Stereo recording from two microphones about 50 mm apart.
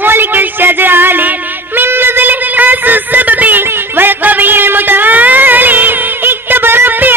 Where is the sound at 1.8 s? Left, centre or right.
Right.